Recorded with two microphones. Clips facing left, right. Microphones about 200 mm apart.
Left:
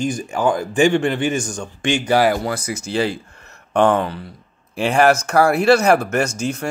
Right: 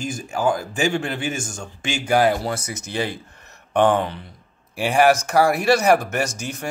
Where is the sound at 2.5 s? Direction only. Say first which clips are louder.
Left 5 dB; 20° right (ahead or behind).